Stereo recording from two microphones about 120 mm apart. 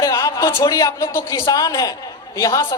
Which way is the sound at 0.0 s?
30° left (ahead or behind).